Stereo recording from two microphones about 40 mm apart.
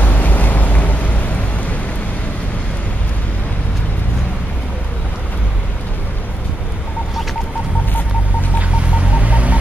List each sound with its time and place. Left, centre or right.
0.0 s vehicle: left
8.5 s hum: right